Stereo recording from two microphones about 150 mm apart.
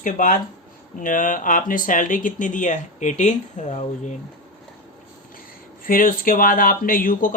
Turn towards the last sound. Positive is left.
turn(degrees=65)  # may be behind; listen again after turning